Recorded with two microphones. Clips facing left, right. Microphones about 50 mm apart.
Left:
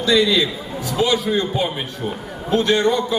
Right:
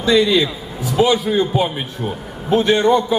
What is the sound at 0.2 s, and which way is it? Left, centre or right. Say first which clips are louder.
A man's voice: right 2 dB; centre.